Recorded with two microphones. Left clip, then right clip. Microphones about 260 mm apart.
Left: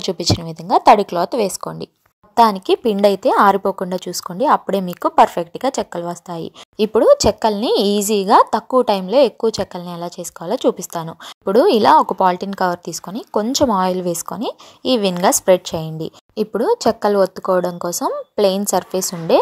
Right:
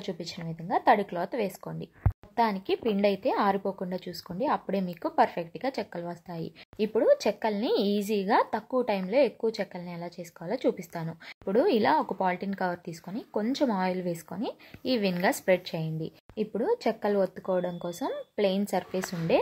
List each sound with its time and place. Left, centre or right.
0.0 s a woman's voice: left